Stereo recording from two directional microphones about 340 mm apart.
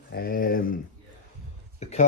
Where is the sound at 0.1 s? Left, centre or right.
Left.